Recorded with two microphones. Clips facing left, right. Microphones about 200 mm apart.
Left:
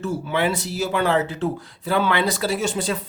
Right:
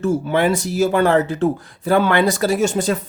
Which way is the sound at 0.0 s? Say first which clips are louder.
Right 5 dB; 45° right (ahead or behind).